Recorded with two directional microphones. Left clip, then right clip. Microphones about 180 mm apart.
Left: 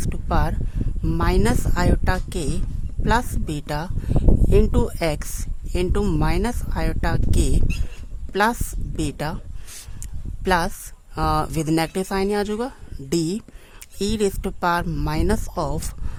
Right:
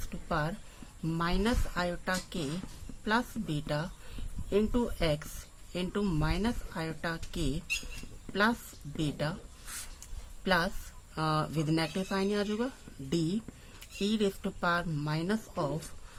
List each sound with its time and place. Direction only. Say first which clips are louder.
0.1 s a sound: left 8 dB; 60° left (ahead or behind)
1.0 s a woman's voice: left 9 dB; 55° left (ahead or behind)
10.4 s speech: left 9 dB; 60° left (ahead or behind)